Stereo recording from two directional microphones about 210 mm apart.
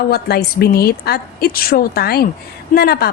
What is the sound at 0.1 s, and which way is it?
A woman's voice, 50° left (ahead or behind).